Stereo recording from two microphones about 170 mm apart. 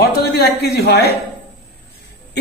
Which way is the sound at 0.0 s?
70° left (ahead or behind).